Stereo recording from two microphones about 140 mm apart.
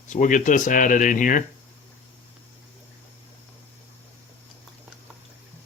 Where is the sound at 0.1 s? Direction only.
65° left (ahead or behind).